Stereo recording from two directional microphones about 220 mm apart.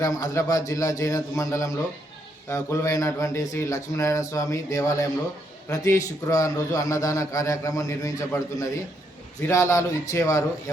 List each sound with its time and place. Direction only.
0.0 s a man's voice: 15° left (ahead or behind)